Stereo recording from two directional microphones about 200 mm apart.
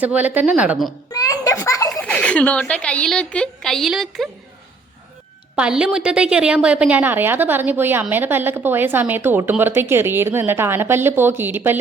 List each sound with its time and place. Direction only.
0.0 s a woman's voice: 5° right (ahead or behind)
1.1 s a sound: 15° left (ahead or behind)
1.9 s a woman's voice: 5° left (ahead or behind)
5.5 s a woman's voice: 5° right (ahead or behind)